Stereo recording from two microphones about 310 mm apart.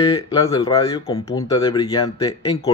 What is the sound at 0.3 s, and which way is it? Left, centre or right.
Speech, centre.